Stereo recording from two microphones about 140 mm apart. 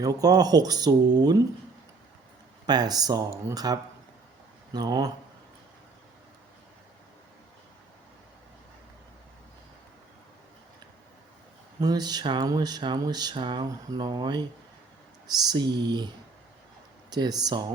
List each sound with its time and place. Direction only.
0.0 s speech: 25° right (ahead or behind)
2.6 s speech: 30° right (ahead or behind)
11.8 s speech: 30° right (ahead or behind)
15.4 s speech: 30° right (ahead or behind)